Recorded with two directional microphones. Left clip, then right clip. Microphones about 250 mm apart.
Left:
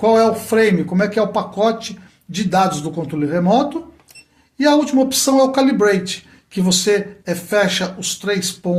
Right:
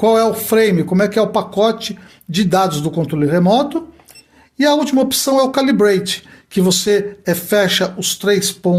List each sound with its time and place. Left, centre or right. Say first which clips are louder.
0.0 s speech: even; right